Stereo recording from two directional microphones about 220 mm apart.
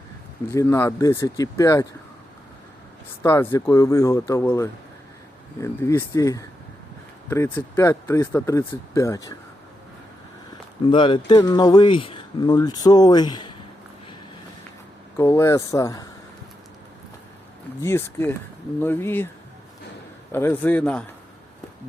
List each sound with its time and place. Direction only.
0.5 s speech: 15° left (ahead or behind)
3.2 s speech: 10° left (ahead or behind)
10.8 s speech: 20° left (ahead or behind)
15.2 s speech: 10° left (ahead or behind)
17.8 s speech: 10° left (ahead or behind)
20.3 s speech: 10° left (ahead or behind)